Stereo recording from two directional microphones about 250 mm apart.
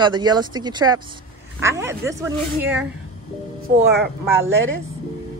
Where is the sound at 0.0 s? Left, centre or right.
Centre.